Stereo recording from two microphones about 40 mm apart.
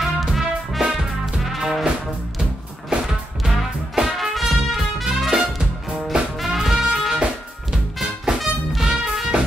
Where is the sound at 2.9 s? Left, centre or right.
Right.